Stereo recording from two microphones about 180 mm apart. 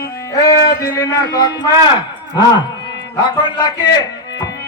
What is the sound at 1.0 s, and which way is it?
A man's voice, 20° left (ahead or behind).